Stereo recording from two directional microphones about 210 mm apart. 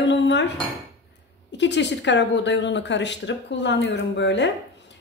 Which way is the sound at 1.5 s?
55° left (ahead or behind).